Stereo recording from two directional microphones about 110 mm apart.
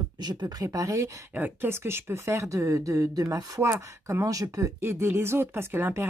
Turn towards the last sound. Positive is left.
turn(degrees=-20)  # may be behind; listen again after turning